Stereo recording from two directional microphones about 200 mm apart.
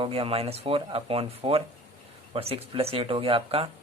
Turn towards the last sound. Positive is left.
turn(degrees=-25)  # may be behind; listen again after turning